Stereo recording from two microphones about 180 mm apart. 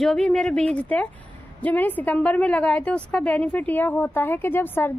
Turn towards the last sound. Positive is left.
turn(degrees=10)  # may be behind; listen again after turning